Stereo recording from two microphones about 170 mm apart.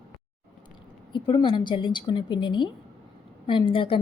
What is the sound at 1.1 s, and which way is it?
A woman's voice, 30° left (ahead or behind).